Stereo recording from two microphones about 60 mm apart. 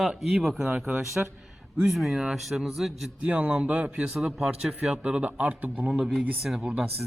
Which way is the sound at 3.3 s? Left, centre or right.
Right.